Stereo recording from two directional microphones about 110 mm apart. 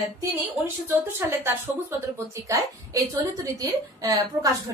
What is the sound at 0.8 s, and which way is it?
A woman's voice, 20° right (ahead or behind).